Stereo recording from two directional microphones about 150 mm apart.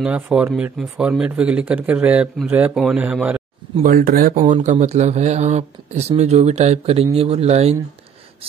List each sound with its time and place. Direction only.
0.0 s speech: 10° right (ahead or behind)
3.8 s speech: 75° right (ahead or behind)
4.6 s speech: 50° right (ahead or behind)